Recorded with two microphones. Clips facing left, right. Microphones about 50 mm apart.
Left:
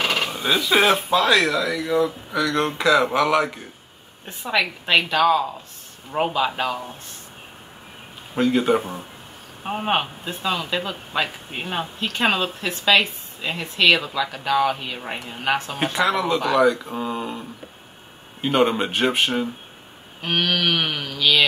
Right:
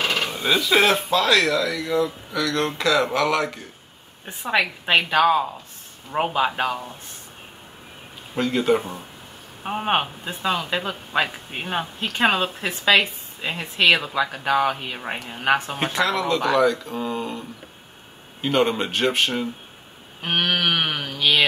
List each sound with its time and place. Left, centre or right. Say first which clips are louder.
0.0 s a sound: left 1 dB; left
0.3 s speech: even; centre
4.3 s a woman's voice: right 1 dB; centre
8.4 s speech: left 2 dB; centre
9.6 s speech: even; centre
12.0 s a woman's voice: right 1 dB; centre
16.1 s speech: left 1 dB; centre
20.2 s speech: even; centre
21.1 s a woman's voice: left 1 dB; right